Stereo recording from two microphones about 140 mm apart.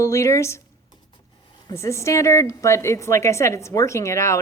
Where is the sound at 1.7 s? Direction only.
20° left (ahead or behind).